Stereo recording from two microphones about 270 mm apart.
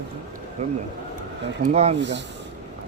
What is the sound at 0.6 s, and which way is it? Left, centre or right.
Speech, right.